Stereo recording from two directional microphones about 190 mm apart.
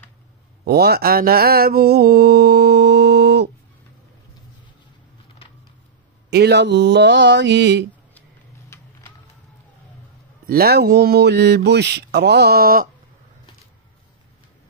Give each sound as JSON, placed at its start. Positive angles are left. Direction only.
{"t": 0.7, "sound": "mantra", "side_deg": -55}
{"t": 6.3, "sound": "mantra", "side_deg": -60}
{"t": 10.4, "sound": "mantra", "side_deg": -50}